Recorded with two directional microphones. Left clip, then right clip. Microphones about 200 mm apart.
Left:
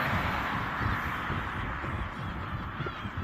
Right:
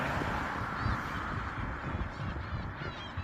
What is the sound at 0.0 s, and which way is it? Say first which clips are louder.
Vehicle: left 4 dB; 45° right (ahead or behind).